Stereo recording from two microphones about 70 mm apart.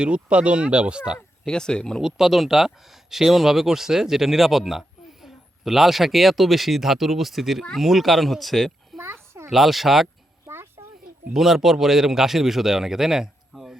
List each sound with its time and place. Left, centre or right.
0.0 s speech: centre
1.5 s speech: centre
2.0 s speech: centre
10.5 s a sound: right
11.3 s speech: centre